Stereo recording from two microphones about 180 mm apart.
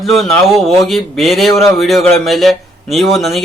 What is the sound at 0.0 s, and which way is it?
Speech, centre (ahead or behind).